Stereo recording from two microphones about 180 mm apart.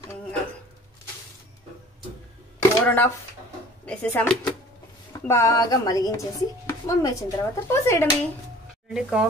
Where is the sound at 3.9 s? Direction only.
5° left (ahead or behind).